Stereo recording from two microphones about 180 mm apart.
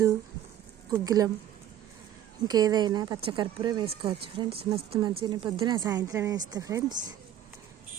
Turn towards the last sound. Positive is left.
turn(degrees=-20)  # may be behind; listen again after turning